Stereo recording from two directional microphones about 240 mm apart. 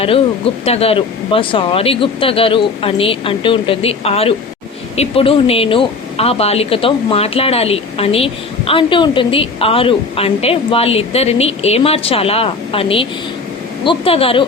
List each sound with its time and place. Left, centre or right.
0.6 s a woman's voice: left